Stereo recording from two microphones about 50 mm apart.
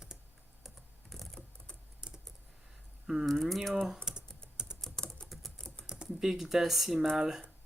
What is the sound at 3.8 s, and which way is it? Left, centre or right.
Typing, centre.